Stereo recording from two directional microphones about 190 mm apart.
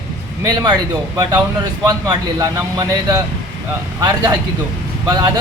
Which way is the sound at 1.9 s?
20° right (ahead or behind).